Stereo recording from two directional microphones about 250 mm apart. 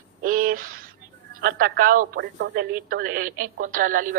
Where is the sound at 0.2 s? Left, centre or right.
Right.